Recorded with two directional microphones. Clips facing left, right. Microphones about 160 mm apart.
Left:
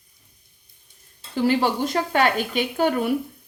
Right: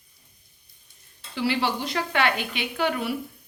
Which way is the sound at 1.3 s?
45° left (ahead or behind).